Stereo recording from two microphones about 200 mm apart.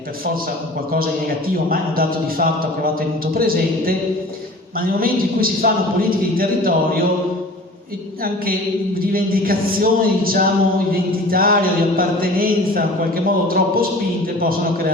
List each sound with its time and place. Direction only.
0.9 s a man's voice: 45° right (ahead or behind)
9.1 s a man's voice: 45° right (ahead or behind)